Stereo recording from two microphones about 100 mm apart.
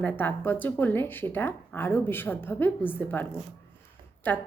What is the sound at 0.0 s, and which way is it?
A woman's voice, 20° left (ahead or behind).